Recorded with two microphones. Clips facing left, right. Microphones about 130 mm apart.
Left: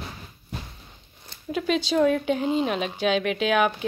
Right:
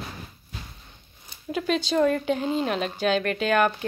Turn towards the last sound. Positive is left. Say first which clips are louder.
# even
turn(degrees=0)  # may be behind; listen again after turning